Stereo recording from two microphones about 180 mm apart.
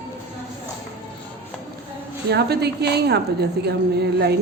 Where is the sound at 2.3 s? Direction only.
65° right (ahead or behind).